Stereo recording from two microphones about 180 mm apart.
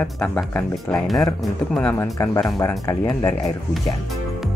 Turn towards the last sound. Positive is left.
turn(degrees=20)  # may be behind; listen again after turning